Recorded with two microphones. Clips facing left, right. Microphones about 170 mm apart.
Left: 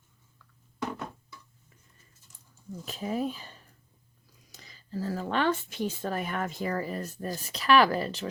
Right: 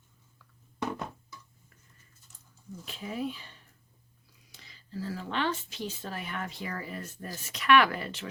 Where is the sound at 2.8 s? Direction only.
40° left (ahead or behind).